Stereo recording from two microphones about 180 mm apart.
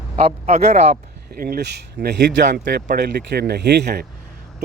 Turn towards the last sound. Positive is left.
turn(degrees=-65)  # may be behind; listen again after turning